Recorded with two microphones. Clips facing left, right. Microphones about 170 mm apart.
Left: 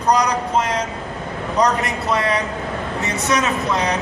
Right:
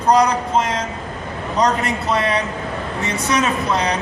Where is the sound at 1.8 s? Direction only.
25° right (ahead or behind).